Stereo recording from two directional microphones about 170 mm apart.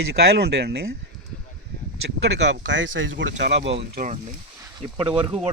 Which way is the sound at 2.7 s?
90° right.